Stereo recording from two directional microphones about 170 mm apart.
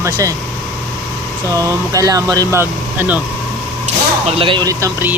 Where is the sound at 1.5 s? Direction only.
20° right (ahead or behind).